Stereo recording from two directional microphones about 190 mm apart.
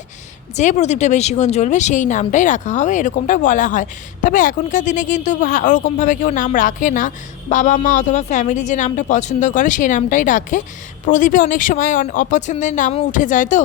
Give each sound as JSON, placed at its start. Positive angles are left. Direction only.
{"t": 0.5, "sound": "speech", "side_deg": 40}